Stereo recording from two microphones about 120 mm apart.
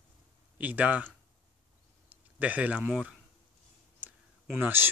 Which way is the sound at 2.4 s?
10° right (ahead or behind).